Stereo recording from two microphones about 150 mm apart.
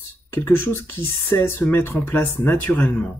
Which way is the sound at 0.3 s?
15° left (ahead or behind).